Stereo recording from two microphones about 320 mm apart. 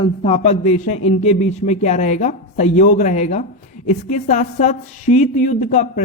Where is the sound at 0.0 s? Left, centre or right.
Centre.